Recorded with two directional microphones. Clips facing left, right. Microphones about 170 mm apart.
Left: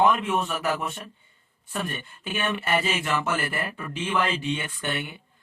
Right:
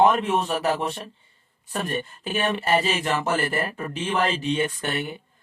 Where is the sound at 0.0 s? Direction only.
40° right (ahead or behind).